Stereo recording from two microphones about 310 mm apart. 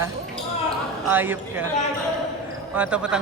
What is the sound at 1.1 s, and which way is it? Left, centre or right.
Speech, centre.